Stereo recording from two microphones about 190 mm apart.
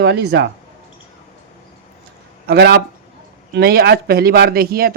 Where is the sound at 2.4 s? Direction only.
60° right (ahead or behind).